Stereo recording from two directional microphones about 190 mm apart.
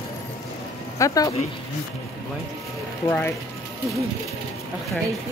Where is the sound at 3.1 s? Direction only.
10° left (ahead or behind).